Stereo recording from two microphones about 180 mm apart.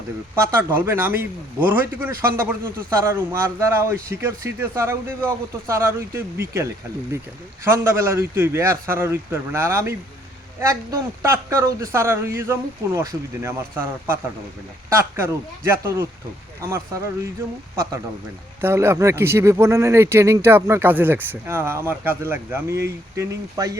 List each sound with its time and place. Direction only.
0.3 s speech: 15° right (ahead or behind)
18.6 s speech: 15° right (ahead or behind)